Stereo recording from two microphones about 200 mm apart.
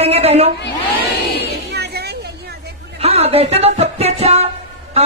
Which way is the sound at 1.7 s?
55° right (ahead or behind).